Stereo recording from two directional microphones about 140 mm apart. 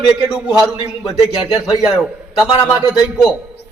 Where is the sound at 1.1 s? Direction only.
40° left (ahead or behind).